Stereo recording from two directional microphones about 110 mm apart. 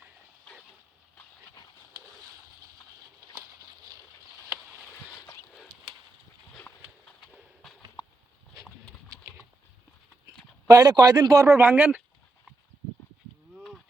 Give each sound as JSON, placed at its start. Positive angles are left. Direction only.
{"t": 7.6, "sound": "clip-clop", "side_deg": 0}
{"t": 9.2, "sound": "a sound", "side_deg": -30}
{"t": 10.7, "sound": "speech", "side_deg": -35}